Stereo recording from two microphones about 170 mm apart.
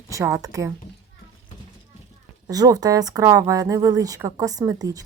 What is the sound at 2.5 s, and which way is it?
Speech, 20° right (ahead or behind).